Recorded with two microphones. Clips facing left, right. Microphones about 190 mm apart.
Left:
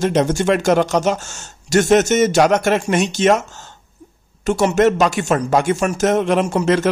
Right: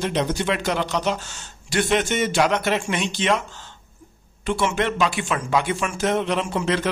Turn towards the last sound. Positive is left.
turn(degrees=45)  # may be behind; listen again after turning